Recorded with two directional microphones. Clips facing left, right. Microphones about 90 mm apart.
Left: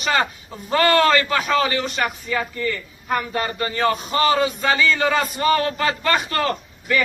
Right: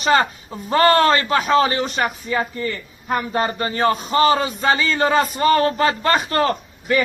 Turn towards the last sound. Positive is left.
turn(degrees=-30)  # may be behind; listen again after turning